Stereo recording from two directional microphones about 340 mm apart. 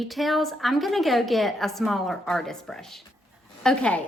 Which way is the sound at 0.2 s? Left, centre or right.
Centre.